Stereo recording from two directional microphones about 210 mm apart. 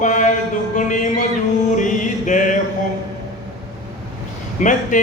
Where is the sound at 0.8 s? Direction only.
35° left (ahead or behind).